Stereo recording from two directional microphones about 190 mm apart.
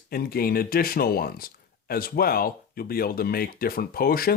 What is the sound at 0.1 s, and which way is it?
Speech, 50° left (ahead or behind).